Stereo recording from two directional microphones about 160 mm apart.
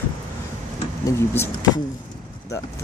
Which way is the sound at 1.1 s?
20° left (ahead or behind).